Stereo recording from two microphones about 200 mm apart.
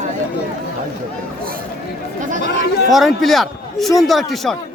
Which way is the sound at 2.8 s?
Centre (ahead or behind).